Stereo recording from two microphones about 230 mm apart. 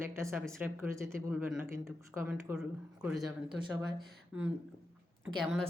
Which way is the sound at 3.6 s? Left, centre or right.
Centre.